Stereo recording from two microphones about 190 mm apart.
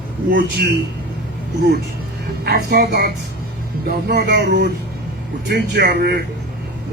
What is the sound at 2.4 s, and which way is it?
Speech, 60° right (ahead or behind).